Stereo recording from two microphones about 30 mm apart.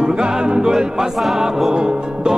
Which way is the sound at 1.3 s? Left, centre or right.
Centre.